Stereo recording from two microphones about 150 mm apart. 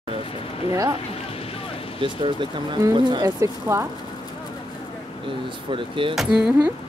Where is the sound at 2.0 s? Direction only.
35° right (ahead or behind).